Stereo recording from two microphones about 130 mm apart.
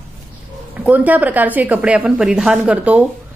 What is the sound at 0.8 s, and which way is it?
A woman's voice, 10° right (ahead or behind).